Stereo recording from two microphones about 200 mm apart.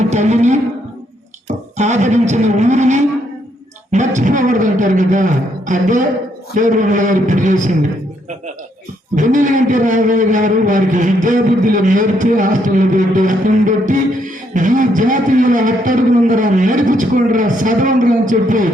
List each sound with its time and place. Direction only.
0.1 s a man's voice: 35° right (ahead or behind)
1.5 s music: 35° right (ahead or behind)
3.9 s a man's voice: 35° right (ahead or behind)
9.1 s a man's voice: 40° right (ahead or behind)